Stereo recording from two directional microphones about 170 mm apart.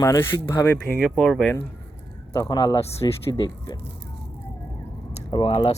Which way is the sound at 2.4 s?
25° left (ahead or behind).